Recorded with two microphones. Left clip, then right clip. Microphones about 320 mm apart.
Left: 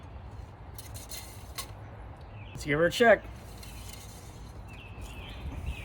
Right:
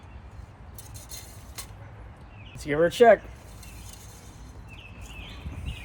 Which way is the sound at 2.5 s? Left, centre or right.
Centre.